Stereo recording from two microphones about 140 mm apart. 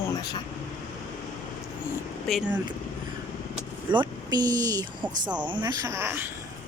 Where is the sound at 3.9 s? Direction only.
30° right (ahead or behind); by 6.3 s 15° right (ahead or behind).